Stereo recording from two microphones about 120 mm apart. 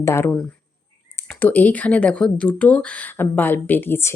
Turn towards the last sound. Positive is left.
turn(degrees=20)  # may be behind; listen again after turning